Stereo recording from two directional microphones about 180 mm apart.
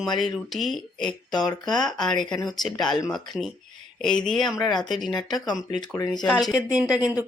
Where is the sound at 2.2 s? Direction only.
20° left (ahead or behind).